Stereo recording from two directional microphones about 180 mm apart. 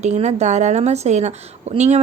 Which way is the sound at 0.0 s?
40° right (ahead or behind).